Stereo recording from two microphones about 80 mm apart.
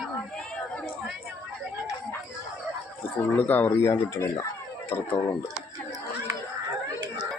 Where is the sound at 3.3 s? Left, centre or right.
Left.